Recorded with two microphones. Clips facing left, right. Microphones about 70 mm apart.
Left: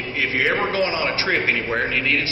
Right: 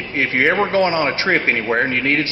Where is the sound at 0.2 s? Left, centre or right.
Right.